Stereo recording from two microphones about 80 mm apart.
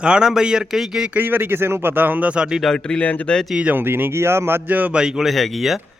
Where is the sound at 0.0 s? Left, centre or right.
Centre.